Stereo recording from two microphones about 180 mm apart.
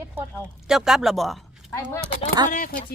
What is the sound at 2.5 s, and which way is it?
Speech, 50° left (ahead or behind).